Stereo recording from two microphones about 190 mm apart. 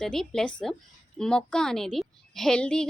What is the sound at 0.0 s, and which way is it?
A woman's voice, 5° left (ahead or behind).